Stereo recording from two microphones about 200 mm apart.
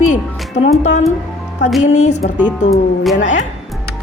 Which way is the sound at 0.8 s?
35° left (ahead or behind).